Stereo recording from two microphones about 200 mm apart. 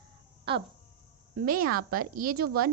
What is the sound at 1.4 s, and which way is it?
A woman's voice, 45° right (ahead or behind).